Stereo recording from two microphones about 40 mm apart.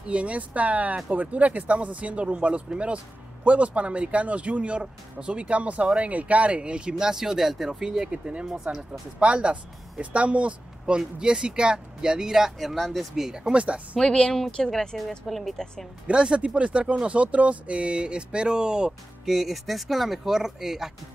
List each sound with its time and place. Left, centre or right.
0.0 s speech: right; by 8.1 s centre
8.1 s speech: right
11.0 s speech: centre
13.1 s speech: centre
13.5 s speech: right
13.9 s speech: centre
16.1 s speech: right
19.2 s speech: centre